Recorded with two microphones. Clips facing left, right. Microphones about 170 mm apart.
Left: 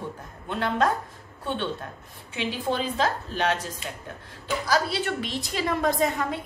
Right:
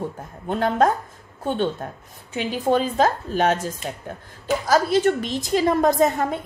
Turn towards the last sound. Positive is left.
turn(degrees=-45)  # may be behind; listen again after turning